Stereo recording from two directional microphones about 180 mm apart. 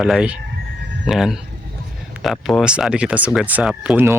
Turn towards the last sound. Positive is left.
turn(degrees=-10)  # may be behind; listen again after turning